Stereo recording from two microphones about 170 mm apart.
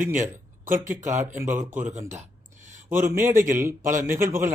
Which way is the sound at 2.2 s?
45° right (ahead or behind).